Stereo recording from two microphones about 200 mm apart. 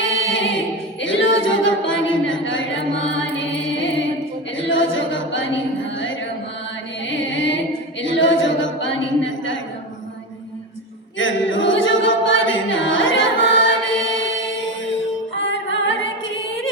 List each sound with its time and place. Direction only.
0.0 s music: 70° left (ahead or behind)
1.0 s a capella: 65° left (ahead or behind)
3.2 s music: 65° left (ahead or behind)
4.5 s a capella: 70° left (ahead or behind)
7.1 s music: 65° left (ahead or behind)
8.0 s a sound: 70° left (ahead or behind)
11.2 s a capella: 70° left (ahead or behind)
15.4 s music: 75° left (ahead or behind)